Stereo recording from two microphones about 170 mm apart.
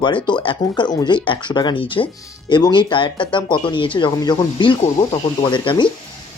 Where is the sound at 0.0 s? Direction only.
25° left (ahead or behind).